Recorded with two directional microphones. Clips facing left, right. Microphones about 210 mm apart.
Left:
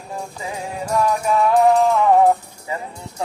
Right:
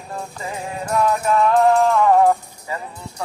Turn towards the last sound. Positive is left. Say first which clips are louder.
# left 2 dB
turn(degrees=20)  # may be behind; listen again after turning